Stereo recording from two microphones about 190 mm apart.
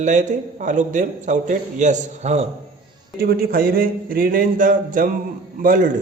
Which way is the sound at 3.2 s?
50° right (ahead or behind).